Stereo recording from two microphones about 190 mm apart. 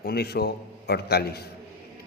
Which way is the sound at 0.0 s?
55° left (ahead or behind).